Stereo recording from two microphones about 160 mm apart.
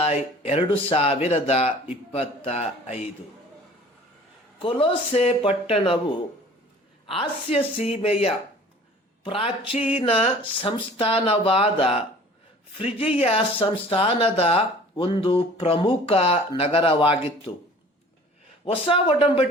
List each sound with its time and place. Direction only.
0.0 s speech: 35° left (ahead or behind)
4.6 s speech: 35° left (ahead or behind)
7.1 s speech: 35° left (ahead or behind)
18.6 s speech: 35° left (ahead or behind)